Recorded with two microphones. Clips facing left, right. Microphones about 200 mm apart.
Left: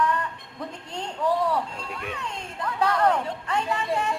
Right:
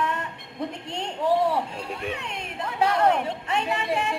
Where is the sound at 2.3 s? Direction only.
65° right (ahead or behind).